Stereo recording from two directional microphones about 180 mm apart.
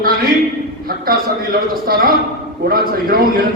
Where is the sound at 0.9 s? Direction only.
55° right (ahead or behind).